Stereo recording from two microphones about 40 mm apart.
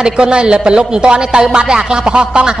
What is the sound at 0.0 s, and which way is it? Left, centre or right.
A woman's voice, right.